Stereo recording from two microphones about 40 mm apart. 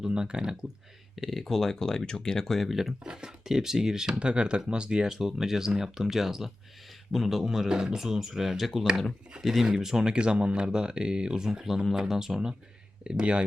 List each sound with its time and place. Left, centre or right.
0.0 s speech: right
1.1 s speech: centre
2.6 s speech: centre
3.1 s speech: centre
4.1 s speech: right; by 7.7 s centre
7.7 s speech: right
7.9 s speech: centre
9.6 s speech: centre
11.4 s speech: centre; by 13.4 s right